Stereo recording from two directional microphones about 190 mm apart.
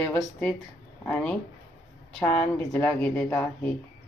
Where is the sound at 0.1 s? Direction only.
5° left (ahead or behind).